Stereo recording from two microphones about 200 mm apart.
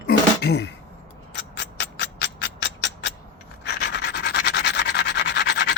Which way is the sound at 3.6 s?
55° left (ahead or behind).